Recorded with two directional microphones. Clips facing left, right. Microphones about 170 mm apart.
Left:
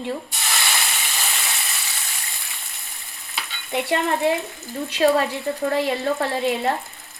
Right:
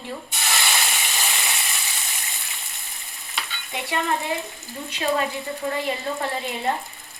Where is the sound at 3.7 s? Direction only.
60° left (ahead or behind).